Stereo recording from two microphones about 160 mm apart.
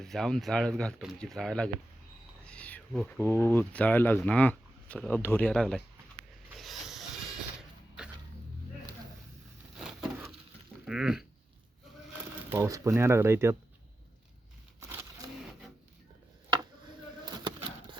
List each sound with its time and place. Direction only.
0.0 s speech: centre (ahead or behind)
2.5 s a sound: 10° left (ahead or behind)
3.2 s speech: 15° left (ahead or behind)
6.6 s train: centre (ahead or behind)
9.7 s patter: 5° right (ahead or behind)
10.8 s a sound: 5° right (ahead or behind)
12.5 s speech: 20° right (ahead or behind)